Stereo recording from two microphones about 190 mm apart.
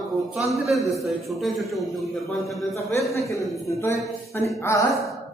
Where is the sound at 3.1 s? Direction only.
15° left (ahead or behind).